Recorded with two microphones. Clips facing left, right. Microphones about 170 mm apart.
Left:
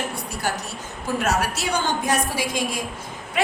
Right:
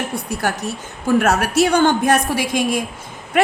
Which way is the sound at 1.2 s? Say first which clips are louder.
Right 5 dB; 60° right (ahead or behind).